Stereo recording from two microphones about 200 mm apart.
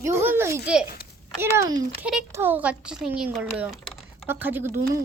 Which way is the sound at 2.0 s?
5° right (ahead or behind).